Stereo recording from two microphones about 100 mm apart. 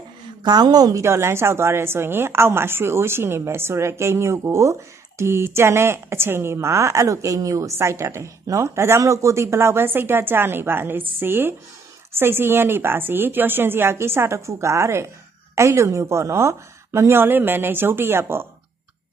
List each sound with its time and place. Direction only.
0.4 s a woman's voice: 45° right (ahead or behind)
1.0 s a woman's voice: 25° right (ahead or behind)